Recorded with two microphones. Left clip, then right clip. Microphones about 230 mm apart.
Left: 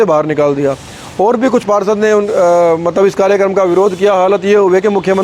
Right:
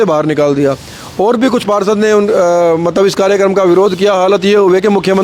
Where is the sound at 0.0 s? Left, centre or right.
Right.